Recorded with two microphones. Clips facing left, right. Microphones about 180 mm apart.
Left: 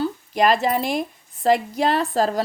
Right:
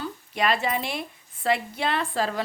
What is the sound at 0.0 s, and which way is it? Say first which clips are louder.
A woman's voice: left 7 dB; 40° left (ahead or behind).